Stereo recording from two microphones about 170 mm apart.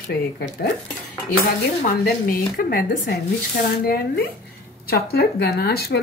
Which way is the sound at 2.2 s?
55° left (ahead or behind).